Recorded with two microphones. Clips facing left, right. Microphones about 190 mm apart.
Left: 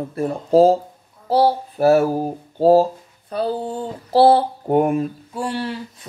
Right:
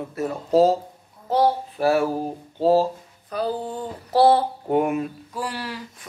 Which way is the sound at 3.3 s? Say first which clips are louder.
Left 3 dB; 30° left (ahead or behind).